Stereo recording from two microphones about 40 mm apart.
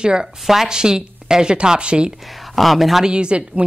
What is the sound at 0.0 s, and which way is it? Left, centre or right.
Speech, right.